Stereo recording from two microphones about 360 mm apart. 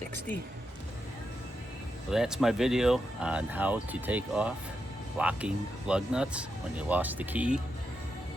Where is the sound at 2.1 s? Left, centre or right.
Centre.